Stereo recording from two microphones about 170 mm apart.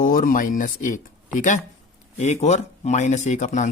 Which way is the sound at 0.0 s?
55° left (ahead or behind).